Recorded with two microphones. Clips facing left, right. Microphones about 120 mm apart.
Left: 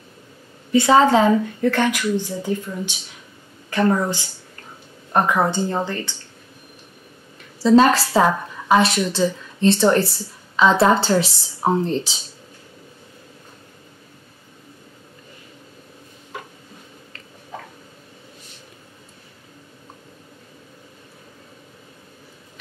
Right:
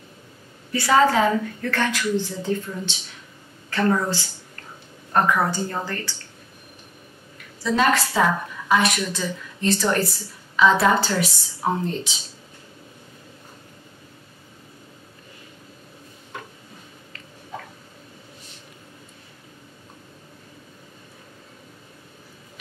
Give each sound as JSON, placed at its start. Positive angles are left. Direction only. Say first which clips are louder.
{"t": 0.7, "sound": "speech", "louder": "left 4 dB", "side_deg": 25}
{"t": 5.1, "sound": "a woman's voice", "louder": "left 2 dB", "side_deg": 20}
{"t": 7.6, "sound": "a woman's voice", "louder": "left 7 dB", "side_deg": 30}
{"t": 16.3, "sound": "tick-tock", "louder": "left 2 dB", "side_deg": 5}